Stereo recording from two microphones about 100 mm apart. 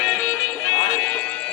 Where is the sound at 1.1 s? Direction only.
10° left (ahead or behind).